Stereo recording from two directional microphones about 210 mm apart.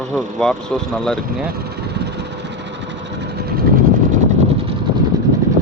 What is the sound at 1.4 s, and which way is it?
Vehicle, 50° right (ahead or behind).